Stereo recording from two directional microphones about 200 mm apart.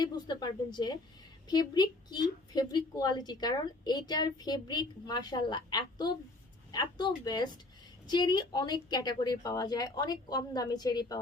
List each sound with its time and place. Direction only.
0.0 s a woman's voice: 20° left (ahead or behind)